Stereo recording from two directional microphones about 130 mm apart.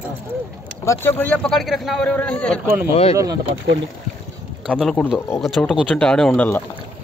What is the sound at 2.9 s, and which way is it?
Speech, 45° left (ahead or behind).